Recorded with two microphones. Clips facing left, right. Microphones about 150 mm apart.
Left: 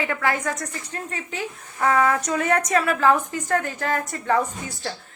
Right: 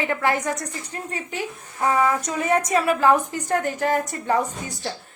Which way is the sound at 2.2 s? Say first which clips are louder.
Even; 25° right (ahead or behind).